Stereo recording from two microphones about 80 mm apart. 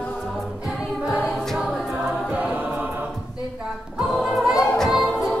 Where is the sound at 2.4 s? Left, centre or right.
Centre.